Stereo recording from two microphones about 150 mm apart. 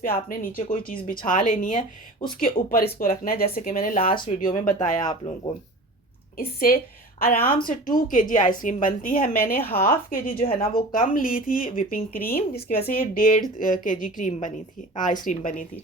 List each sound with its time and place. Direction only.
0.0 s a woman's voice: 70° left (ahead or behind)
2.4 s speech: 75° left (ahead or behind)
3.8 s a woman's voice: 55° left (ahead or behind)
4.0 s speech: 35° left (ahead or behind)
4.3 s a woman's voice: 60° left (ahead or behind)
4.9 s speech: 30° left (ahead or behind)
6.3 s a woman's voice: 80° left
7.9 s a woman's voice: 60° left (ahead or behind); by 9.6 s 80° left
9.7 s a woman's voice: 65° left (ahead or behind)